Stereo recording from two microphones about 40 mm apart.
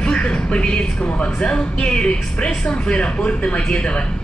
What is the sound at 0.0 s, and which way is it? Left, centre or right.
Music, centre.